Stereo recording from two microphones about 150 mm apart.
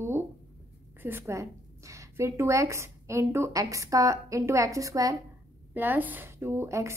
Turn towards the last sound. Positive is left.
turn(degrees=-20)  # may be behind; listen again after turning